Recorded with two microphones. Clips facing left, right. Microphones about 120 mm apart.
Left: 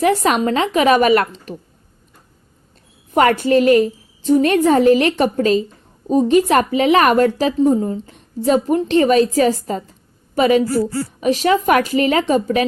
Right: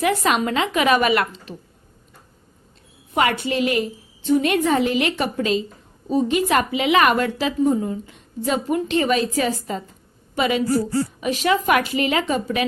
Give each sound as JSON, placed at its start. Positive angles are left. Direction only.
{"t": 0.0, "sound": "a woman's voice", "side_deg": 35}
{"t": 3.2, "sound": "a woman's voice", "side_deg": 45}